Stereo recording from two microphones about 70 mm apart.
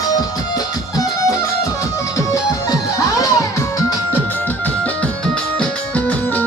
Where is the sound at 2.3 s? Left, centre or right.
Left.